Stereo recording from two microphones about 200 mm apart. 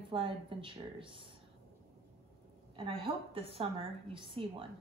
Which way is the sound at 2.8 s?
25° right (ahead or behind).